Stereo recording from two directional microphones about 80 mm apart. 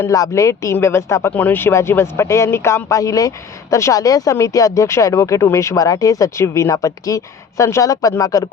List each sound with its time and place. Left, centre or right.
0.1 s speech: left
1.3 s speech: left